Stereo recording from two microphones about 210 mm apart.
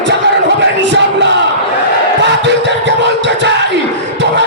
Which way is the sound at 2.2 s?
55° right (ahead or behind).